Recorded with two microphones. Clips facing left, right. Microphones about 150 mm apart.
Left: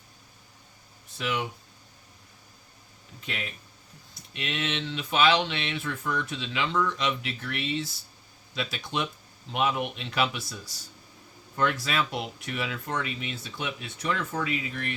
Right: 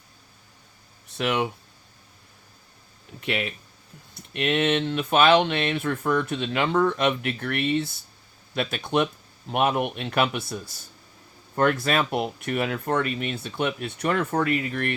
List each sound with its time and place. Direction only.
1.1 s speech: 65° right (ahead or behind)
3.2 s speech: 70° right (ahead or behind)
4.1 s speech: 55° right (ahead or behind)